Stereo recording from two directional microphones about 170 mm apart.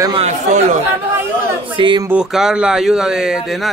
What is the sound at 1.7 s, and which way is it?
Speech, 30° right (ahead or behind).